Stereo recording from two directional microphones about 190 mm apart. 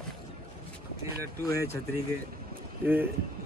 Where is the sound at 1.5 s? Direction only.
15° left (ahead or behind).